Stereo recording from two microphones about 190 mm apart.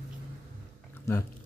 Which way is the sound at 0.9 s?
15° left (ahead or behind).